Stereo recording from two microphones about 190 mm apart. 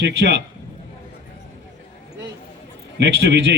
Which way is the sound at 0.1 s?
65° right (ahead or behind).